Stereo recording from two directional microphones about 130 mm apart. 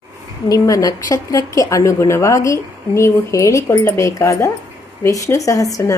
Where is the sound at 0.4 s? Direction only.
25° left (ahead or behind).